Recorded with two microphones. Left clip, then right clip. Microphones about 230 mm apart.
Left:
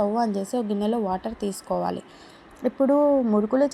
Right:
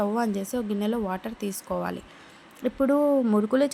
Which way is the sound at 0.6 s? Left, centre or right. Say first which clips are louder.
Left 3 dB; centre.